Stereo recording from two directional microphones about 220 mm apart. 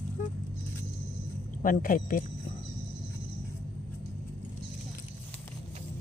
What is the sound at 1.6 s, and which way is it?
Speech, 40° left (ahead or behind).